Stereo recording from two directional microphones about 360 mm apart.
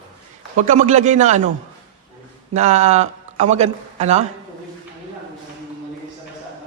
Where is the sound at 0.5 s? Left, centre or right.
Centre.